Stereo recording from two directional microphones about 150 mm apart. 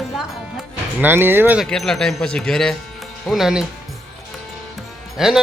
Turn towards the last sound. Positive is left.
turn(degrees=-5)  # may be behind; listen again after turning